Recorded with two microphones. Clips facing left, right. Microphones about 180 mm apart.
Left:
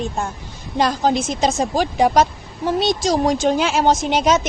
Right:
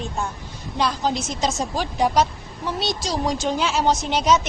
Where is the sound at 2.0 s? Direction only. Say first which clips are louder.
Left 3 dB; 45° left (ahead or behind).